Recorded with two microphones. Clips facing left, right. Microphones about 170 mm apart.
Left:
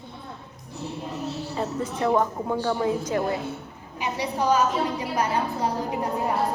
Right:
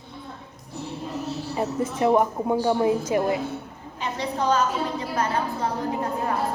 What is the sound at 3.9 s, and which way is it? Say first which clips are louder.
A woman's voice: even; 10° left (ahead or behind).